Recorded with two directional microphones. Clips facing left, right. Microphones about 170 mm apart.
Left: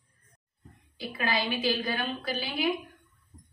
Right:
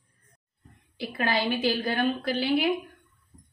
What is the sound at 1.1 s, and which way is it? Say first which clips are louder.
A woman's voice: right 3 dB; 50° right (ahead or behind).